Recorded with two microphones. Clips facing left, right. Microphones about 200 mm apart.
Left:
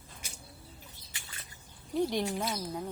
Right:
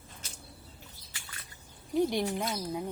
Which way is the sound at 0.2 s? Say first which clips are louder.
Left 2 dB; 10° left (ahead or behind).